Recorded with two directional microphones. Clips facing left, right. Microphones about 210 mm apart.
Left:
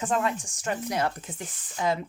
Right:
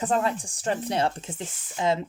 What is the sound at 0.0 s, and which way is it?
A woman's voice, 35° right (ahead or behind).